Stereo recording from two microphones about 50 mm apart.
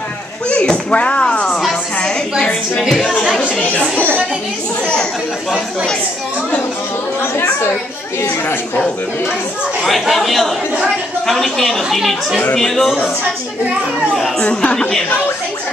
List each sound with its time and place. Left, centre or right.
0.5 s a sound: left
3.0 s speech: left
10.0 s a woman's voice: centre
14.4 s speech: left